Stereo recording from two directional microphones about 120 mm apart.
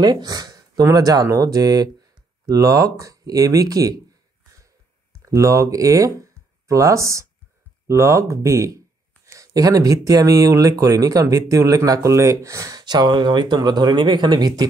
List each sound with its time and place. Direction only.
0.0 s speech: 35° right (ahead or behind)
5.2 s speech: 25° right (ahead or behind)